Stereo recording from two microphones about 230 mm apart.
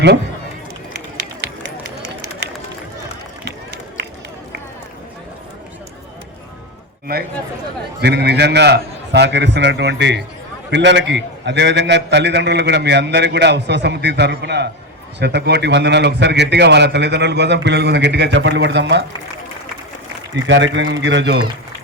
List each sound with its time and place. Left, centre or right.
3.4 s run: right
8.0 s a man's voice: right
20.3 s a man's voice: right